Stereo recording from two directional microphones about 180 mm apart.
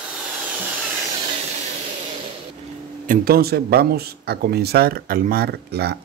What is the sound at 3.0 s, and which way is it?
Speech, 60° right (ahead or behind).